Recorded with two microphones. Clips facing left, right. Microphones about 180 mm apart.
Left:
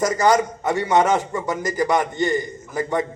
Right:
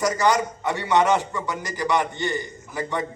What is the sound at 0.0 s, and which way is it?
A man's voice, 45° left (ahead or behind).